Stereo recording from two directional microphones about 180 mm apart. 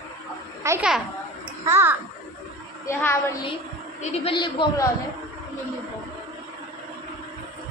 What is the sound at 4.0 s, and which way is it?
Speech, 35° left (ahead or behind).